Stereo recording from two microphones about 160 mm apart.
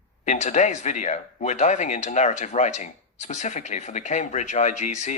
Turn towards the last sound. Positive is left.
turn(degrees=45)  # may be behind; listen again after turning